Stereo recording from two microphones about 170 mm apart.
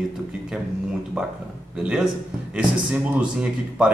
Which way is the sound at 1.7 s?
5° right (ahead or behind).